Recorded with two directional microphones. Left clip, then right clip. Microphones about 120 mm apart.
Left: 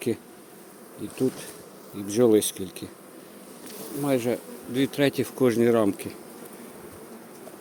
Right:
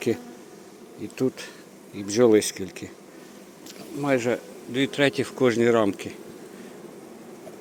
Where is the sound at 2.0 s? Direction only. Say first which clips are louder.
Right 2 dB; 30° left (ahead or behind).